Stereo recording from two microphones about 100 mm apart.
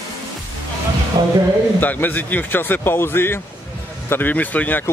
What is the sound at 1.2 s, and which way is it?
Speech, 45° right (ahead or behind).